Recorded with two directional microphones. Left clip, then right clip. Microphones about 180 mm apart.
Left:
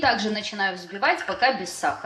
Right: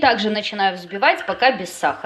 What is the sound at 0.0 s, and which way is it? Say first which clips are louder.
Speech: right 6 dB; 40° right (ahead or behind).